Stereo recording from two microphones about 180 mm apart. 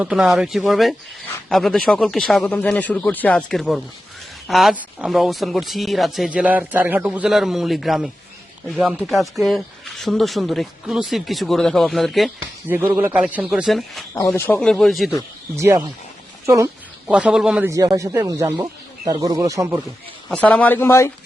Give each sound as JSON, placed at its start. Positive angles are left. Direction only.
{"t": 0.0, "sound": "speech", "side_deg": -5}
{"t": 12.4, "sound": "speech", "side_deg": -10}
{"t": 14.2, "sound": "speech", "side_deg": 15}
{"t": 15.5, "sound": "speech", "side_deg": -15}
{"t": 17.1, "sound": "speech", "side_deg": -5}
{"t": 17.7, "sound": "speech", "side_deg": -20}
{"t": 20.3, "sound": "speech", "side_deg": 10}